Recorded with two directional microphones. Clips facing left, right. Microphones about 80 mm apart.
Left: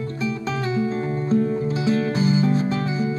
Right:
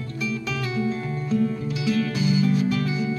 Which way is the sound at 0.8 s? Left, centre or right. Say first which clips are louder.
Left 3 dB; left.